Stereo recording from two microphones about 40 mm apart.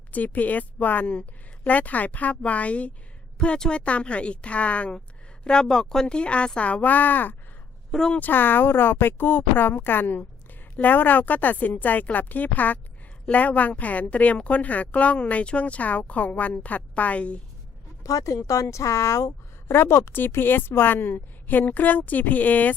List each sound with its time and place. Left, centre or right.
0.1 s a woman's voice: left
5.6 s a woman's voice: centre; by 17.4 s left
19.6 s a woman's voice: left